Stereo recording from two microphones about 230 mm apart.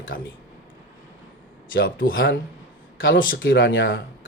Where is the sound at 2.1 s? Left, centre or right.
Left.